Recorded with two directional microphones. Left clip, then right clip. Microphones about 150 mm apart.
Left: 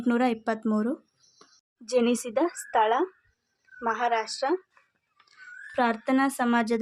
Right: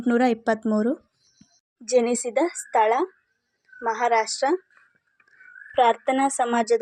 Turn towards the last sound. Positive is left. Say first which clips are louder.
# right 4 dB
turn(degrees=-25)  # may be behind; listen again after turning